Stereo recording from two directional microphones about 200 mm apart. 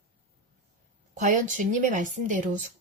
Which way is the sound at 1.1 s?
40° right (ahead or behind).